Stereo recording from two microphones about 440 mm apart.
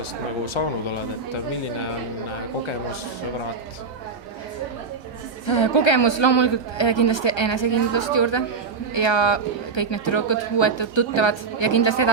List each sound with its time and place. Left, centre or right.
5.5 s speech: left